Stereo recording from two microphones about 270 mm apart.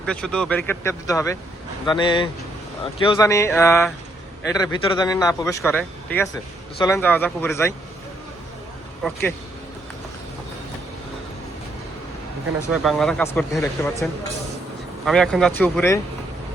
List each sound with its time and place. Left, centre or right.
0.0 s speech: centre
9.0 s speech: centre
12.7 s speech: centre